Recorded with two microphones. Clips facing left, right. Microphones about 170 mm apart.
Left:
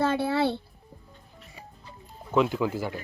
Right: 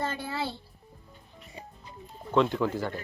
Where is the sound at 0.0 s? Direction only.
75° left (ahead or behind).